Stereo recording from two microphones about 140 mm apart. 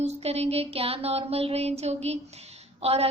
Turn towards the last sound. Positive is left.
turn(degrees=-45)  # may be behind; listen again after turning